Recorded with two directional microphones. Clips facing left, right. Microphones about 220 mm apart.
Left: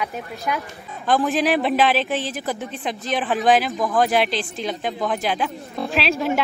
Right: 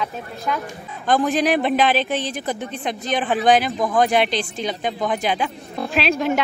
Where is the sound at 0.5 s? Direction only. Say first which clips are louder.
Right 2 dB; 10° left (ahead or behind).